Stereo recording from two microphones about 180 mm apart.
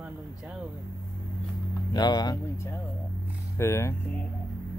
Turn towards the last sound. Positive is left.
turn(degrees=15)  # may be behind; listen again after turning